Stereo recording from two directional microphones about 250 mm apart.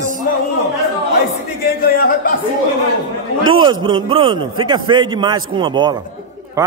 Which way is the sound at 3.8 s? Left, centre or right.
Centre.